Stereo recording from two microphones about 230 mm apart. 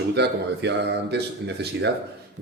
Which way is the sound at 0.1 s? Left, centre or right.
Right.